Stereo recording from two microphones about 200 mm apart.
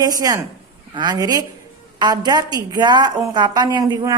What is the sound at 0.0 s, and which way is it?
A woman's voice, 20° right (ahead or behind).